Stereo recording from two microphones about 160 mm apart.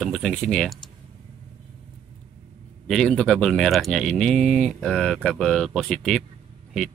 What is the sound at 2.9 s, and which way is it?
Speech, 5° left (ahead or behind).